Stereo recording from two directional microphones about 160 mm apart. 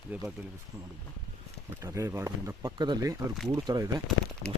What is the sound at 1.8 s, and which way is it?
Speech, 20° right (ahead or behind).